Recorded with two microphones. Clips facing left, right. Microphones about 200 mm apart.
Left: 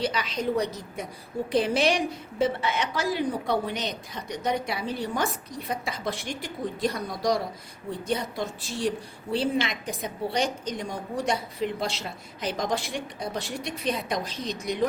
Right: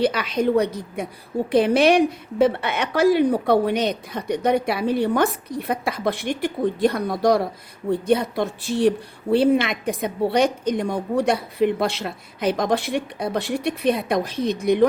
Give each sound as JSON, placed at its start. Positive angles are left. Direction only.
{"t": 0.0, "sound": "a woman's voice", "side_deg": -60}